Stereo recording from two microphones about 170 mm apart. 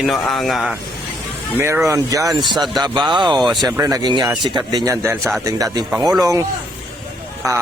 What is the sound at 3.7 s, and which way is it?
Speech, 20° right (ahead or behind).